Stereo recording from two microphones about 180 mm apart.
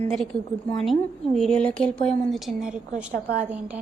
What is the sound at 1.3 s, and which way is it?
Speech, 5° left (ahead or behind).